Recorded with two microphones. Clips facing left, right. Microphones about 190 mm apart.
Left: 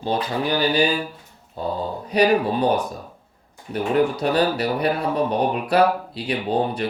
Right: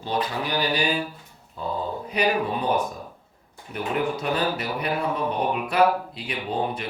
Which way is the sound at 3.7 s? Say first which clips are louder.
Left 6 dB; 35° left (ahead or behind).